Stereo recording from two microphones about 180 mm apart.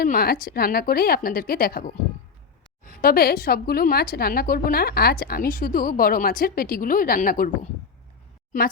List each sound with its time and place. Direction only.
0.0 s a woman's voice: 55° left (ahead or behind)